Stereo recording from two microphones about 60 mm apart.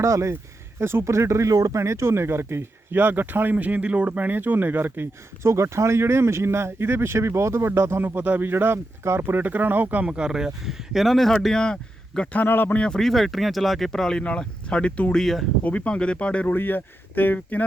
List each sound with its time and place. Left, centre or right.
0.0 s speech: right
1.8 s speech: right
5.4 s speech: right; by 12.3 s centre
12.3 s speech: left
12.7 s speech: centre
13.0 s speech: centre; by 15.1 s left
15.1 s speech: centre
15.6 s speech: left
16.6 s speech: left